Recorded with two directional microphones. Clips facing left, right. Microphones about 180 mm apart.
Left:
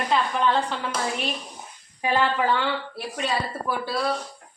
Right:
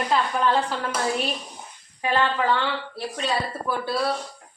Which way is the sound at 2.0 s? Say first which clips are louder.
Even; 15° left (ahead or behind).